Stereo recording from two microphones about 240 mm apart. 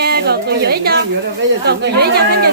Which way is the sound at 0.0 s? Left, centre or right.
Right.